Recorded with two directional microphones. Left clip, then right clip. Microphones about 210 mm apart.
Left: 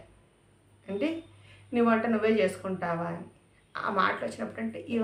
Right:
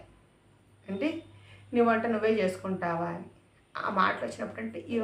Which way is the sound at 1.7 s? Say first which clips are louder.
Even; 15° left (ahead or behind).